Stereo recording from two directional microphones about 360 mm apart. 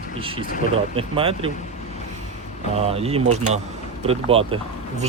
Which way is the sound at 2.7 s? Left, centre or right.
Centre.